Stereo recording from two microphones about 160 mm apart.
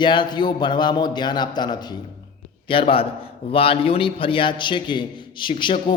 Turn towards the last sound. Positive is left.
turn(degrees=30)  # may be behind; listen again after turning